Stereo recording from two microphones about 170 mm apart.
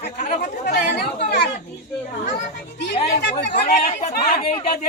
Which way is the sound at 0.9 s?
70° left (ahead or behind).